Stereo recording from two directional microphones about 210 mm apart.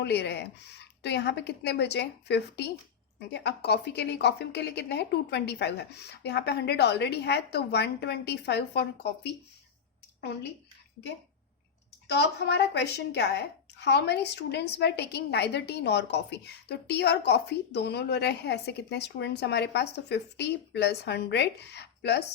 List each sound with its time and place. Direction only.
0.0 s a woman's voice: 55° left (ahead or behind)
12.0 s a woman's voice: 55° left (ahead or behind)